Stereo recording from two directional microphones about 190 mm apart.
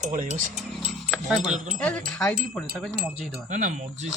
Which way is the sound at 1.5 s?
40° right (ahead or behind).